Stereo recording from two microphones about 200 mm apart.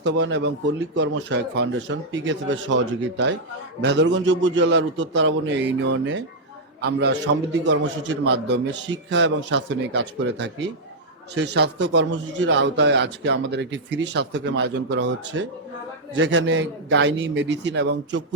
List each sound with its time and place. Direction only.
0.0 s a man's voice: 60° right (ahead or behind)